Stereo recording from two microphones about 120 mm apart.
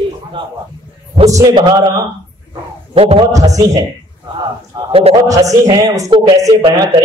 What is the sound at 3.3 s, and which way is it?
Music, 30° right (ahead or behind).